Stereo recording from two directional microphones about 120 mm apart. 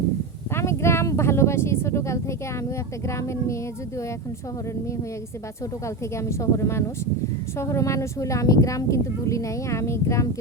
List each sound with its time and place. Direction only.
0.5 s speech: 20° left (ahead or behind)
6.1 s speech: 25° left (ahead or behind)